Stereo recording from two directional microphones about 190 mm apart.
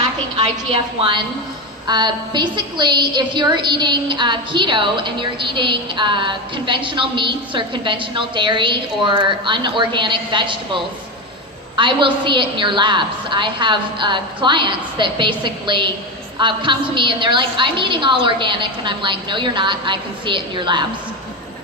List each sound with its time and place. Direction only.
0.3 s a woman's voice: 25° right (ahead or behind)
11.8 s a woman's voice: 25° right (ahead or behind)